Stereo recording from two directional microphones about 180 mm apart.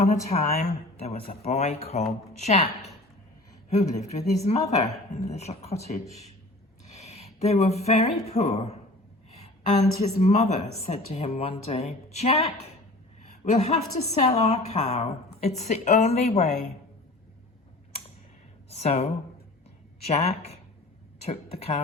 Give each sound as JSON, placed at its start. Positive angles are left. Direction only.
{"t": 0.0, "sound": "a woman's voice", "side_deg": 35}
{"t": 4.2, "sound": "a woman's voice", "side_deg": 20}
{"t": 4.7, "sound": "a woman's voice", "side_deg": 35}
{"t": 6.9, "sound": "a sound", "side_deg": 35}
{"t": 8.3, "sound": "a woman's voice", "side_deg": 35}
{"t": 18.7, "sound": "speech", "side_deg": 35}
{"t": 20.1, "sound": "a woman's voice", "side_deg": 35}